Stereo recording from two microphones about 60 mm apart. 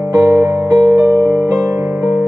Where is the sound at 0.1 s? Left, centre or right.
Right.